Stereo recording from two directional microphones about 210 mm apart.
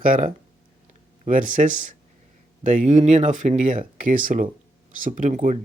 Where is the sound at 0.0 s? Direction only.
40° right (ahead or behind).